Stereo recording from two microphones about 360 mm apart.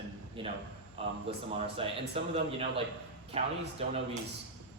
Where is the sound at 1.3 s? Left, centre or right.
Centre.